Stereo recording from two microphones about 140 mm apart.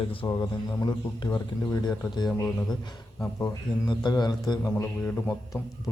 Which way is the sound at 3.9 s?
30° left (ahead or behind).